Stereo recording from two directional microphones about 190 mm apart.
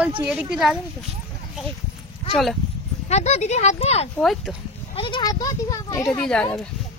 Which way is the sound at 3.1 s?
35° left (ahead or behind).